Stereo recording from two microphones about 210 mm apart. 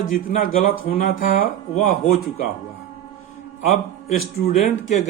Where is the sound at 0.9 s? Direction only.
40° left (ahead or behind).